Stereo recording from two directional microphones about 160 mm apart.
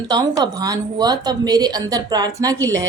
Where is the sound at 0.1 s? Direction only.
25° right (ahead or behind).